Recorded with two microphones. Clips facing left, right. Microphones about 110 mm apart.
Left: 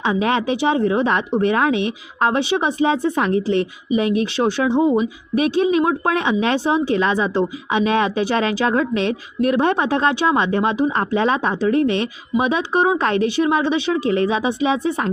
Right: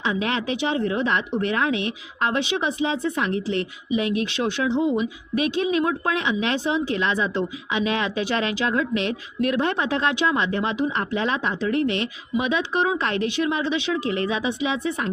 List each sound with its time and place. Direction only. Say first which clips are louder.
0.0 s speech: left 6 dB; 45° left (ahead or behind)
2.8 s speech: left 6 dB; 50° left (ahead or behind)